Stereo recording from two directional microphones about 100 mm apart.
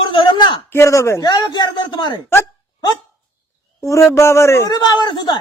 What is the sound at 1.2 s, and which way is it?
Speech, 45° left (ahead or behind).